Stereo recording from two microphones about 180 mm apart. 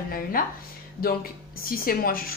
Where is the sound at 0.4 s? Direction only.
55° left (ahead or behind).